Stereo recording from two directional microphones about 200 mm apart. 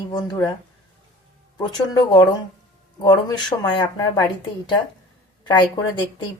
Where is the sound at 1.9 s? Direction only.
20° left (ahead or behind).